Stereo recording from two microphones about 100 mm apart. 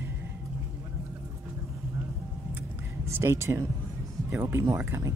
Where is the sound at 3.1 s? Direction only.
25° right (ahead or behind).